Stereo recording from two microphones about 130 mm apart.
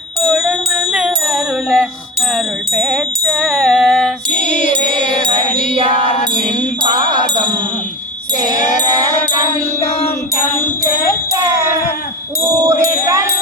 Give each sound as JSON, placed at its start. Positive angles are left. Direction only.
{"t": 0.2, "sound": "music", "side_deg": 0}
{"t": 4.9, "sound": "music", "side_deg": -40}
{"t": 12.6, "sound": "music", "side_deg": -25}